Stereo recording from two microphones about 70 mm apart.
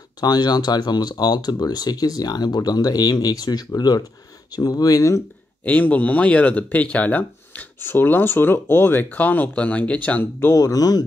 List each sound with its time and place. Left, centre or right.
0.2 s speech: left
5.6 s speech: left
10.5 s speech: left